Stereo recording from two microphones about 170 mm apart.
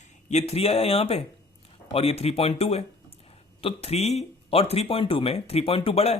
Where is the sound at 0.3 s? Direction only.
40° left (ahead or behind).